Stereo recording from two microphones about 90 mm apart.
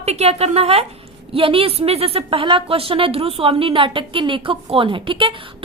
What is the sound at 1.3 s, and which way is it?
A woman's voice, 90° right.